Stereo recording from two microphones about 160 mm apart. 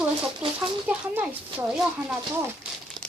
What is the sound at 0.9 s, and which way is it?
Speech, 5° right (ahead or behind).